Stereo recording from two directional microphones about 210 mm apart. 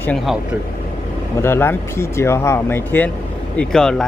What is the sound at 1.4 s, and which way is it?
Speech, 10° left (ahead or behind).